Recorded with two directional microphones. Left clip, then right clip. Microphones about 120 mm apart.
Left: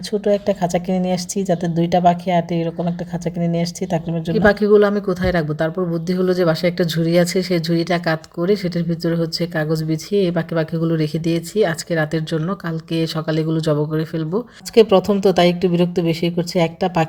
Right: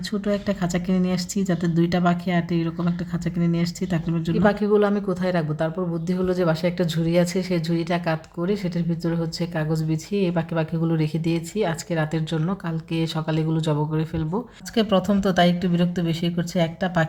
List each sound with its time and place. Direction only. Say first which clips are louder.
0.1 s speech: left 9 dB; 15° left (ahead or behind)
4.4 s speech: left 7 dB; 30° left (ahead or behind)